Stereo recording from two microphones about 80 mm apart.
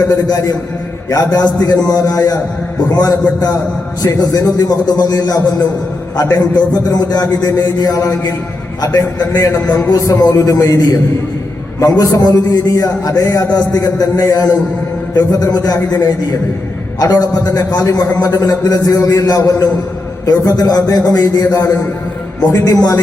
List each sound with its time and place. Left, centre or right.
0.1 s a man's voice: left